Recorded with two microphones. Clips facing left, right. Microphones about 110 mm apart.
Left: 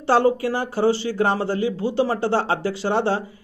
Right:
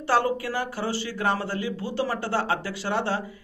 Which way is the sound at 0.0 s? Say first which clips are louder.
Left 6 dB; 30° left (ahead or behind).